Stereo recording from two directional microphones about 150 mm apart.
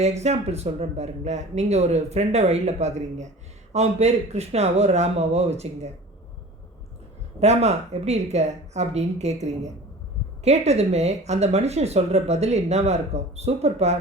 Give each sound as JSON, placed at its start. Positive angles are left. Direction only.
{"t": 0.0, "sound": "speech", "side_deg": -50}
{"t": 7.3, "sound": "speech", "side_deg": -45}